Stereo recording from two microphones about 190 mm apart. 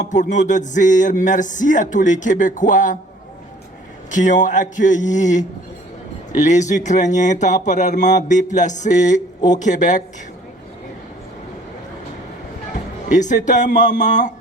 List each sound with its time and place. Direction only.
0.1 s music: 40° left (ahead or behind)
4.1 s music: 40° left (ahead or behind)
12.7 s speech: 40° left (ahead or behind)